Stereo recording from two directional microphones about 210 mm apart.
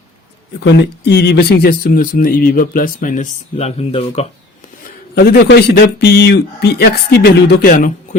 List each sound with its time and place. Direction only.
0.6 s speech: 55° left (ahead or behind); by 4.3 s 30° left (ahead or behind)
5.1 s speech: 50° left (ahead or behind)